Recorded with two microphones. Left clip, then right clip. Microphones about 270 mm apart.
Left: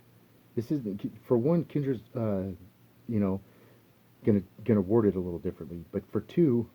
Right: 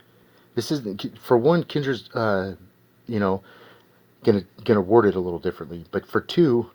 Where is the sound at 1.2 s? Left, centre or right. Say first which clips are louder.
Right 9 dB; centre.